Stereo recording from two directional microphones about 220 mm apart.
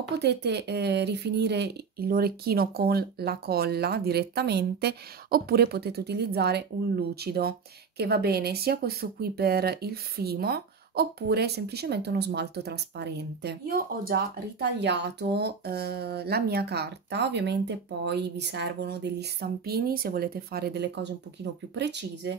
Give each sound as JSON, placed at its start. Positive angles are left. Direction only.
{"t": 0.2, "sound": "speech", "side_deg": -50}